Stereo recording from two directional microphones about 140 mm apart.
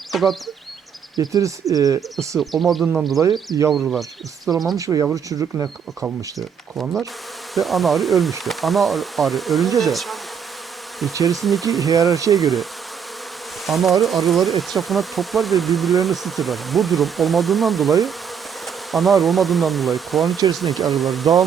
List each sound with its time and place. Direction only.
0.1 s speech: centre (ahead or behind)
1.1 s speech: 25° right (ahead or behind)
2.4 s bee: centre (ahead or behind)
4.5 s speech: 25° right (ahead or behind)
6.7 s bee: centre (ahead or behind)
11.3 s bee: centre (ahead or behind)
13.7 s bee: centre (ahead or behind)